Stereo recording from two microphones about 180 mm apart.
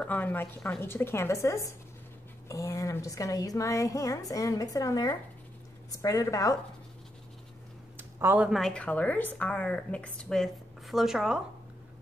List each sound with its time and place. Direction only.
0.0 s a woman's voice: 10° left (ahead or behind)
8.0 s a woman's voice: 10° right (ahead or behind)